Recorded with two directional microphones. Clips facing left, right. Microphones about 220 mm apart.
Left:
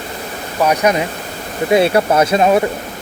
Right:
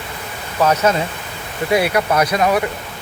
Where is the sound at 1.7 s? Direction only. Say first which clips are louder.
Left 4 dB; 25° left (ahead or behind).